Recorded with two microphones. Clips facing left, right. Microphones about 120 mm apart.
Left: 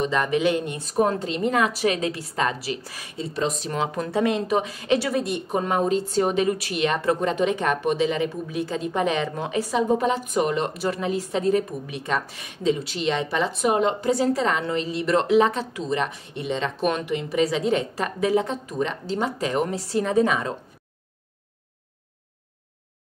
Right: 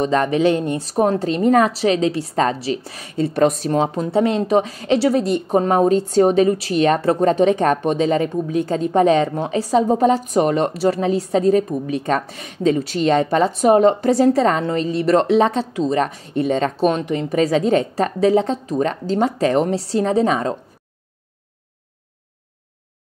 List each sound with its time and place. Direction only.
0.0 s a woman's voice: 35° right (ahead or behind)
3.2 s a woman's voice: 50° right (ahead or behind); by 20.5 s 35° right (ahead or behind)